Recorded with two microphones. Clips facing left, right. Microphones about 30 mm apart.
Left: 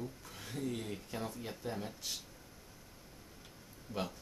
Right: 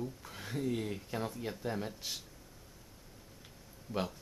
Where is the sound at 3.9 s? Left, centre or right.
Centre.